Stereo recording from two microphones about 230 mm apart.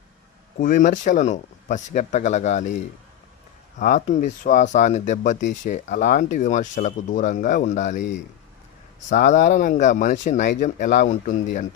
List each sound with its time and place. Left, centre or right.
0.6 s speech: left
9.0 s speech: left